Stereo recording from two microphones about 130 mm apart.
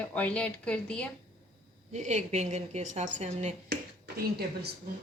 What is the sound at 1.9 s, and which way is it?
A woman's voice, 60° right (ahead or behind).